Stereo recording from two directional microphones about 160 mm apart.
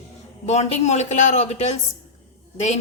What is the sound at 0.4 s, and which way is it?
A woman's voice, 45° left (ahead or behind).